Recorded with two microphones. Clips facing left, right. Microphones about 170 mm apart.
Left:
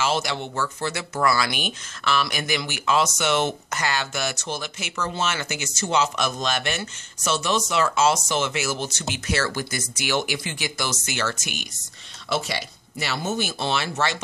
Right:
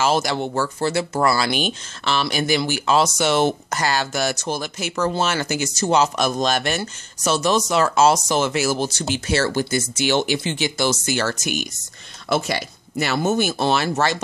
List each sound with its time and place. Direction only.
0.0 s speech: 40° right (ahead or behind)